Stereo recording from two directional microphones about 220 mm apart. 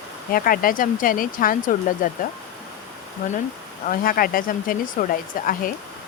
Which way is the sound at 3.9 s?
40° left (ahead or behind).